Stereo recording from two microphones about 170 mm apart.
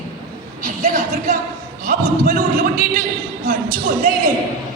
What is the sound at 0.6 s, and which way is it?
A man's voice, 55° right (ahead or behind).